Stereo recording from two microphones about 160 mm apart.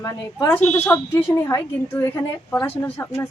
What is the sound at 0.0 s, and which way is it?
A woman's voice, 20° left (ahead or behind).